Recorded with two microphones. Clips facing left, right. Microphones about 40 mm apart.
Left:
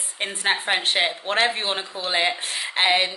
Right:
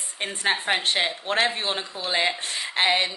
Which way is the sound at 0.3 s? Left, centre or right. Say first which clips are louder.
Left 1 dB; centre.